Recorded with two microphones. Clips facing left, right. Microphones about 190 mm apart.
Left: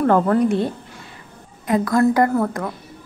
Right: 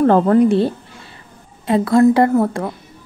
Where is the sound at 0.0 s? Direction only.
30° right (ahead or behind).